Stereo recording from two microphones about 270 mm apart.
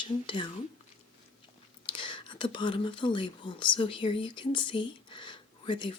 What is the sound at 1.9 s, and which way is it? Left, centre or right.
Speech, centre.